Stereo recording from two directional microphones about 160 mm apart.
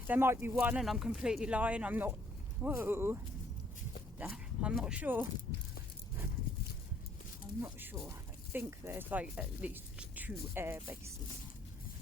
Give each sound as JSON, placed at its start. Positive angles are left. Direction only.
{"t": 0.1, "sound": "speech", "side_deg": -15}
{"t": 4.2, "sound": "speech", "side_deg": -5}
{"t": 7.6, "sound": "speech", "side_deg": -15}